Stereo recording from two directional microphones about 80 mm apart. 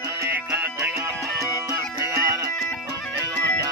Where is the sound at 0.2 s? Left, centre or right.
Right.